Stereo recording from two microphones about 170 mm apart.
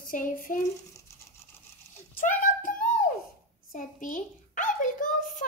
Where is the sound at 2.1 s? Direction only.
50° left (ahead or behind).